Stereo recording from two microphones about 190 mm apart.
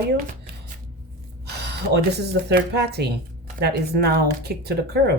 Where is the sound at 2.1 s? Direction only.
60° right (ahead or behind).